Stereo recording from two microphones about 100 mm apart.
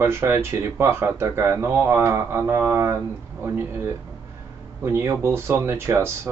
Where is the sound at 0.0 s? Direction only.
25° right (ahead or behind).